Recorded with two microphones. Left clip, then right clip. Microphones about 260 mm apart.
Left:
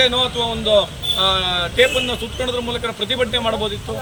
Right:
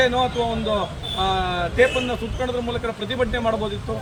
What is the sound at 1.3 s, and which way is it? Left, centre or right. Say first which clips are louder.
Speech: left 3 dB; centre.